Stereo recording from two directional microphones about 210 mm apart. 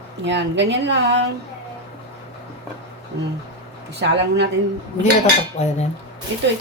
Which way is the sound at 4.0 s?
55° right (ahead or behind).